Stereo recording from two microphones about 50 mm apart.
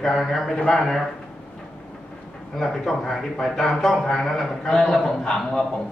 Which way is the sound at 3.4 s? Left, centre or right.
Centre.